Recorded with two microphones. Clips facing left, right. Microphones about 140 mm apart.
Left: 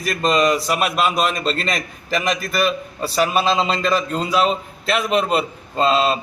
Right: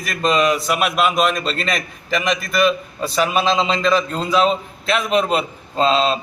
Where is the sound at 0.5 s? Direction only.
35° left (ahead or behind).